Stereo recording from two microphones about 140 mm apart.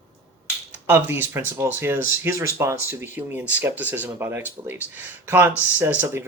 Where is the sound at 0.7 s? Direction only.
15° right (ahead or behind).